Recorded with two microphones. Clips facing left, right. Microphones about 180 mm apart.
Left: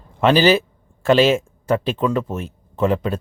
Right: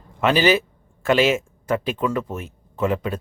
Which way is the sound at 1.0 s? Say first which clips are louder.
Left 4 dB; 30° left (ahead or behind).